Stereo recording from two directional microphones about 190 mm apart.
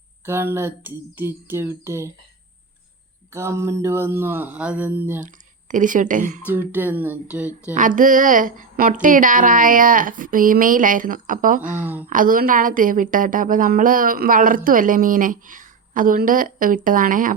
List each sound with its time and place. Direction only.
0.3 s speech: 15° right (ahead or behind)
3.3 s speech: 15° right (ahead or behind)
5.2 s speech: 45° right (ahead or behind)
6.5 s speech: 10° right (ahead or behind)
7.7 s a woman's voice: 45° right (ahead or behind)